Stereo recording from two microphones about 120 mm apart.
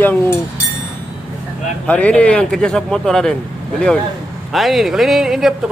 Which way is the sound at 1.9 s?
10° left (ahead or behind).